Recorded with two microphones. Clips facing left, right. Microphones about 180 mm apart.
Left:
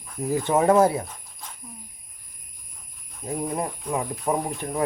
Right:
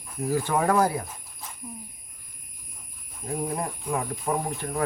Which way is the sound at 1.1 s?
5° right (ahead or behind).